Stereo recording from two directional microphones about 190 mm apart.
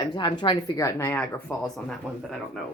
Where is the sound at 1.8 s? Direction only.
Centre (ahead or behind).